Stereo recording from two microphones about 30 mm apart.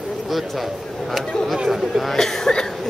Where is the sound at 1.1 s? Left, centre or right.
Centre.